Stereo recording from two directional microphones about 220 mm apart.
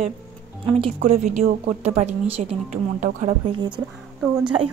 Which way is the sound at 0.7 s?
25° right (ahead or behind).